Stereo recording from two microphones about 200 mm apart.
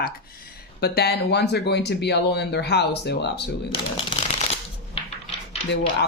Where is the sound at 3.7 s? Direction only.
25° left (ahead or behind).